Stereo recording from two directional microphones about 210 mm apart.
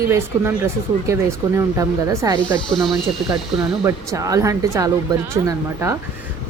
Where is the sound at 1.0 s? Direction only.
15° right (ahead or behind).